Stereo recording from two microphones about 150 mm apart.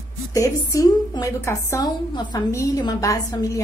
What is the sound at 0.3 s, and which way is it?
A woman's voice, 25° left (ahead or behind).